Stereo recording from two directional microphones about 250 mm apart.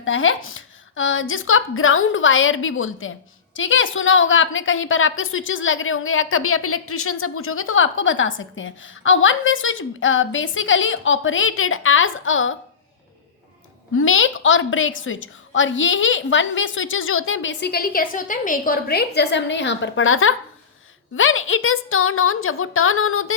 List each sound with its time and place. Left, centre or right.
0.0 s a woman's voice: left
13.9 s a woman's voice: left